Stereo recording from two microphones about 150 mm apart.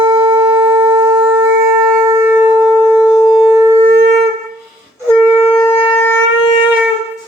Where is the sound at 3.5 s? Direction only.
15° right (ahead or behind).